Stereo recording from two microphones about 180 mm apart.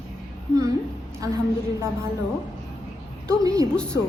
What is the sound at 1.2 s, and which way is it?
Speech, 20° right (ahead or behind).